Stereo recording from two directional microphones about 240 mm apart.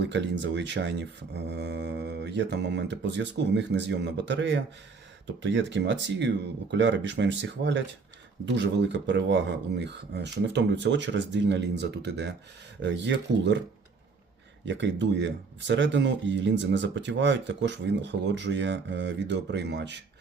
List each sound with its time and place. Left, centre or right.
0.0 s speech: right
14.6 s speech: right